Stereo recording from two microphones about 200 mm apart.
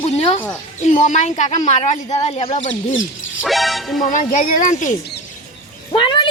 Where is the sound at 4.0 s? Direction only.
40° left (ahead or behind).